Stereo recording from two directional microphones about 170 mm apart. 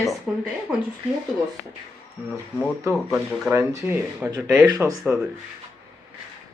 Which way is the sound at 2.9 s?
Centre (ahead or behind).